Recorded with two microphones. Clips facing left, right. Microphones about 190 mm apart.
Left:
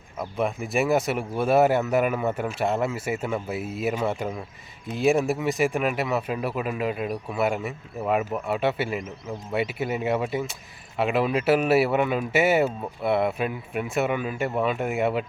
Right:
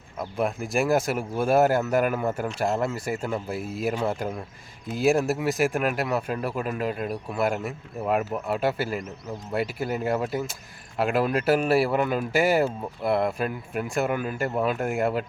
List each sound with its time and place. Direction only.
0.2 s speech: centre (ahead or behind)